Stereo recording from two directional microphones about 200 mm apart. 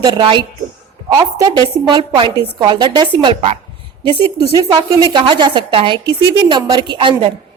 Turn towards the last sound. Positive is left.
turn(degrees=-25)  # may be behind; listen again after turning